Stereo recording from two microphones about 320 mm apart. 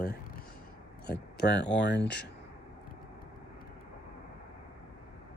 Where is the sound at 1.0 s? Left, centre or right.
Left.